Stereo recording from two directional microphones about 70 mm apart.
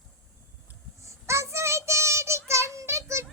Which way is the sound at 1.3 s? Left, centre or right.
Right.